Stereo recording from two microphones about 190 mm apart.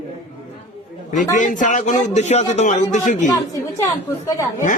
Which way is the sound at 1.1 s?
40° left (ahead or behind).